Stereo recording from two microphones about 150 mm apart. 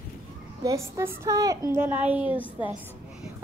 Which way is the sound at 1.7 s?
10° right (ahead or behind).